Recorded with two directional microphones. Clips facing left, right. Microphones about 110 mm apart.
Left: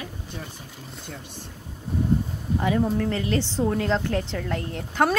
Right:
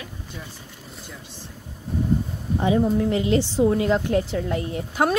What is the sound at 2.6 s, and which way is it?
A woman's voice, 20° right (ahead or behind).